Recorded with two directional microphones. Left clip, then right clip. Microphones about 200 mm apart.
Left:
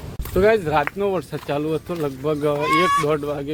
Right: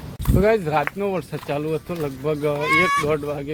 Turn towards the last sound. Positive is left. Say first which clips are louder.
# left 1 dB
turn(degrees=15)  # may be behind; listen again after turning